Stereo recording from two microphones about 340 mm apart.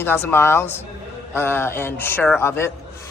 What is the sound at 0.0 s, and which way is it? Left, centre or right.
A man's voice, centre.